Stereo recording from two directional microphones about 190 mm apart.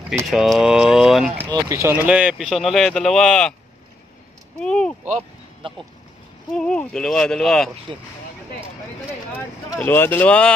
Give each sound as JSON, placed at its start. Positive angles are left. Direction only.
{"t": 0.3, "sound": "speech", "side_deg": 0}
{"t": 1.5, "sound": "speech", "side_deg": -15}
{"t": 4.6, "sound": "speech", "side_deg": 5}
{"t": 5.6, "sound": "speech", "side_deg": -25}
{"t": 6.5, "sound": "speech", "side_deg": 5}
{"t": 9.8, "sound": "speech", "side_deg": 10}